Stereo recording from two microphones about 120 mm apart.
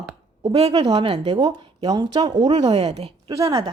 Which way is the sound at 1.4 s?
35° right (ahead or behind).